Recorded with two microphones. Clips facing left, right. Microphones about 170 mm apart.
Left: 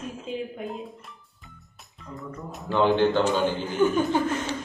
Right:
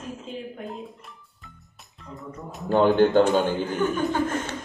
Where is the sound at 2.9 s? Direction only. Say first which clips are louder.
Right 4 dB; 50° right (ahead or behind).